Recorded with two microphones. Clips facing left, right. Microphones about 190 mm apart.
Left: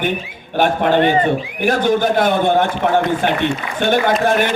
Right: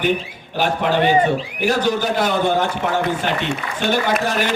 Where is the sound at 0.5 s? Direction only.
55° left (ahead or behind).